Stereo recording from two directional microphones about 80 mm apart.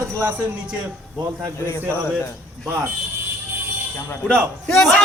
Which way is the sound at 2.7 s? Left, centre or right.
Right.